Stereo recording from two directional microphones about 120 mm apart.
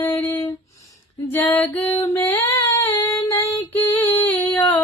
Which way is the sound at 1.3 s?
15° left (ahead or behind).